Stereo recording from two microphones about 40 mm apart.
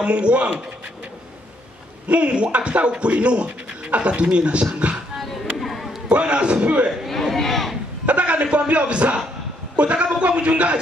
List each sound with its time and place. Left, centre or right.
0.0 s speech: right
2.0 s speech: right
5.2 s a sound: centre
6.0 s speech: right
7.3 s a sound: centre
8.0 s a man's voice: right